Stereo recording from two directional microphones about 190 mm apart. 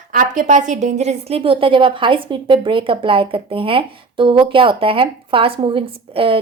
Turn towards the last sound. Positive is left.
turn(degrees=-30)  # may be behind; listen again after turning